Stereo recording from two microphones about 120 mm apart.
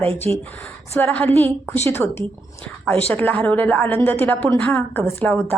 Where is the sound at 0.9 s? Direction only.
15° left (ahead or behind).